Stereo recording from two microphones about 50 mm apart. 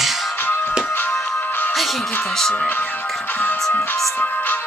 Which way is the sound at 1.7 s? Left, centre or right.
Centre.